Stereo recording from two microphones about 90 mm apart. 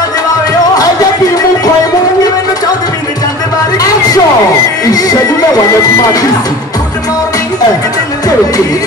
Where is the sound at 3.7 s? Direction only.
45° left (ahead or behind).